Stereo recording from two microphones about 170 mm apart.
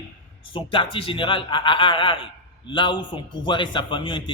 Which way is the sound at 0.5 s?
30° left (ahead or behind).